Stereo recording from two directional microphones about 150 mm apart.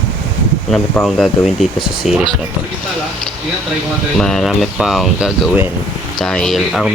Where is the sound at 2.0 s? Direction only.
Centre (ahead or behind).